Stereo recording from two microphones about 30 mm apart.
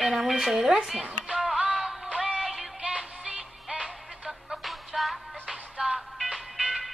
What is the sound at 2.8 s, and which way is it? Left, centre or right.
Music, right.